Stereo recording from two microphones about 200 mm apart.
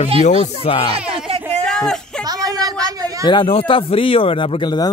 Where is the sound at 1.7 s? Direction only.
5° left (ahead or behind).